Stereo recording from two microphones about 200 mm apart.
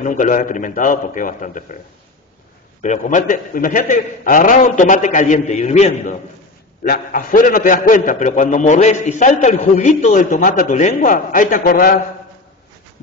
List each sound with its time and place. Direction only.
0.0 s a man's voice: 40° left (ahead or behind)
2.8 s a man's voice: 40° left (ahead or behind)
6.8 s a man's voice: 45° left (ahead or behind)